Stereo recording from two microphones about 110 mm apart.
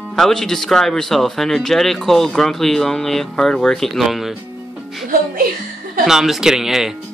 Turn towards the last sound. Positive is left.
turn(degrees=-5)  # may be behind; listen again after turning